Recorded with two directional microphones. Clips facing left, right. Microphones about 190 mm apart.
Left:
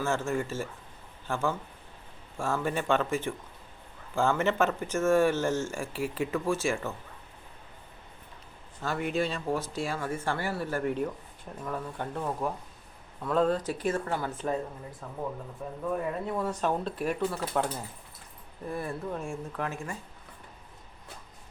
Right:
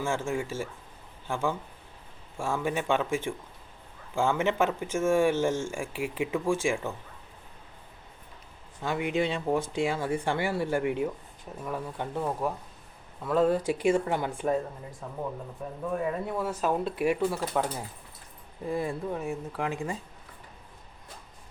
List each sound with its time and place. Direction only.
0.0 s speech: 10° right (ahead or behind)
8.8 s speech: 15° right (ahead or behind)
15.0 s speech: centre (ahead or behind)